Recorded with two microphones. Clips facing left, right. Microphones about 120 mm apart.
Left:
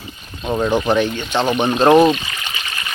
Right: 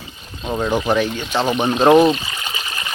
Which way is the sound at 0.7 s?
5° right (ahead or behind).